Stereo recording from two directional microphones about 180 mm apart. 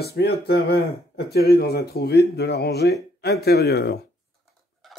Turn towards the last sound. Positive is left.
turn(degrees=65)  # may be behind; listen again after turning